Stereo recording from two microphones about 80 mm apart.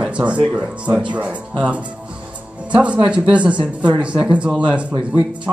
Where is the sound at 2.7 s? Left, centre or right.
Centre.